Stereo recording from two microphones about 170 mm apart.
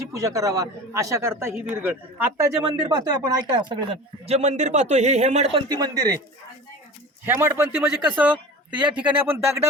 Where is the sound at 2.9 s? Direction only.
25° right (ahead or behind); by 5.6 s 40° right (ahead or behind).